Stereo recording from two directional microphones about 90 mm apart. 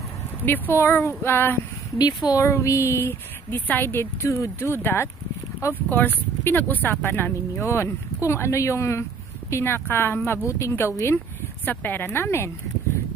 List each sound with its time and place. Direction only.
0.5 s a woman's voice: 25° left (ahead or behind)
11.6 s a woman's voice: 20° left (ahead or behind)